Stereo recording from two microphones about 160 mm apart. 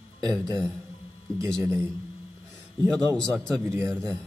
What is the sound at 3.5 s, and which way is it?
Speech, 20° right (ahead or behind).